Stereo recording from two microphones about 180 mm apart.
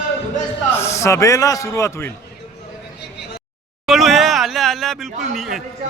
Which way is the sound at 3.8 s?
Centre (ahead or behind).